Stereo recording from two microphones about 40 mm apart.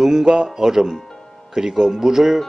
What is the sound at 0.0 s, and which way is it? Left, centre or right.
Speech, centre.